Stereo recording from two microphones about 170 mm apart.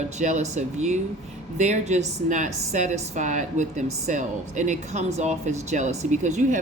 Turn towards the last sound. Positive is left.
turn(degrees=-45)  # may be behind; listen again after turning